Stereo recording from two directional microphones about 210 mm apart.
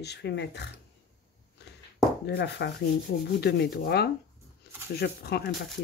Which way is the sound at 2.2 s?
55° left (ahead or behind).